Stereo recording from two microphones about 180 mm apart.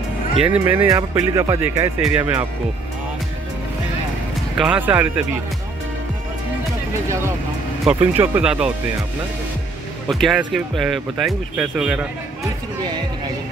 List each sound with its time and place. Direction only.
0.4 s speech: 10° right (ahead or behind)
4.6 s speech: 5° right (ahead or behind)
8.0 s speech: 10° right (ahead or behind)
10.0 s speech: centre (ahead or behind)